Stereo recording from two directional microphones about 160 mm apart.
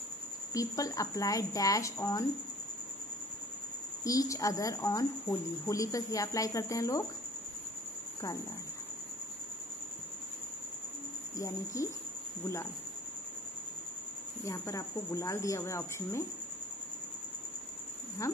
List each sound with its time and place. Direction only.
0.5 s a woman's voice: 20° left (ahead or behind)
4.0 s a woman's voice: 20° left (ahead or behind)
11.3 s a woman's voice: 20° left (ahead or behind)
14.4 s speech: 20° left (ahead or behind)
18.2 s a woman's voice: 20° left (ahead or behind)